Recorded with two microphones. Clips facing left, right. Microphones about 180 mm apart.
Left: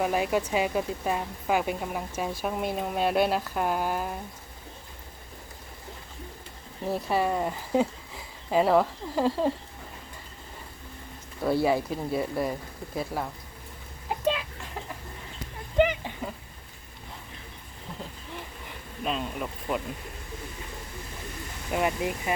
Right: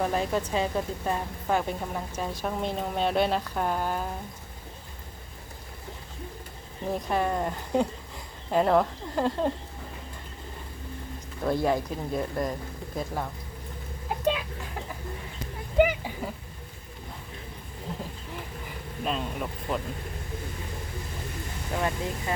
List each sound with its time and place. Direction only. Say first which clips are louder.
0.0 s a woman's voice: left 1 dB; 10° left (ahead or behind)
6.8 s speech: left 1 dB; 5° left (ahead or behind)
11.4 s a woman's voice: left 1 dB; 5° left (ahead or behind)
14.1 s chicken: even; 5° right (ahead or behind)
15.8 s a sound: right 1 dB; 5° right (ahead or behind)
19.0 s speech: even; centre (ahead or behind)
21.7 s a woman's voice: left 3 dB; 15° left (ahead or behind)